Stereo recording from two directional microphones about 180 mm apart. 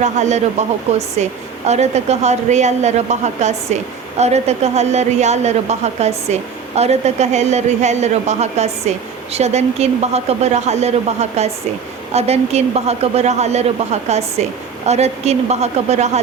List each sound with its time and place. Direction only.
0.0 s a woman's voice: 40° right (ahead or behind)